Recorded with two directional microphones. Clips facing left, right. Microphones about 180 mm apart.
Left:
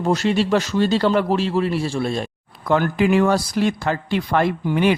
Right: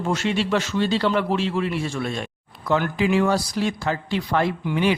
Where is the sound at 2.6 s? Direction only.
50° left (ahead or behind).